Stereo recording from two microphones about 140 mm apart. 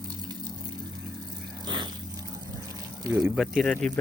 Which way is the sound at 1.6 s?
30° right (ahead or behind).